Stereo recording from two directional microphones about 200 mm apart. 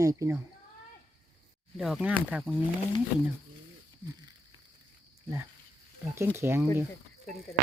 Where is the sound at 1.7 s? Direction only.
Centre (ahead or behind).